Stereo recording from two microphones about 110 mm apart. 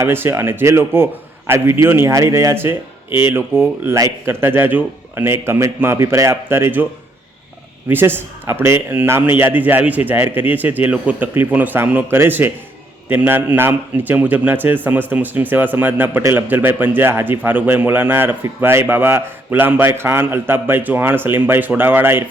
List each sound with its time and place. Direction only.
0.0 s a man's voice: 20° right (ahead or behind)
7.9 s a man's voice: 20° right (ahead or behind)